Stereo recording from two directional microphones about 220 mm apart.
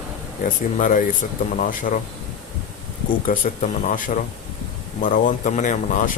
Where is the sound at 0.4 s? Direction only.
40° left (ahead or behind).